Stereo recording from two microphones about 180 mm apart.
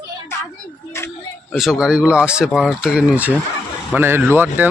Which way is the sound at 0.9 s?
15° left (ahead or behind).